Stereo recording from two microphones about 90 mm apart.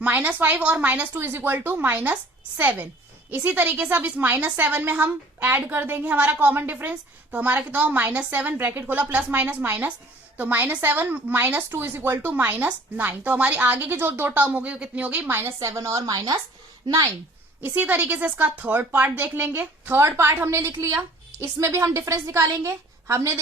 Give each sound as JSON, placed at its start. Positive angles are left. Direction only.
{"t": 0.0, "sound": "a woman's voice", "side_deg": -20}
{"t": 15.5, "sound": "a woman's voice", "side_deg": -35}
{"t": 17.7, "sound": "a woman's voice", "side_deg": -20}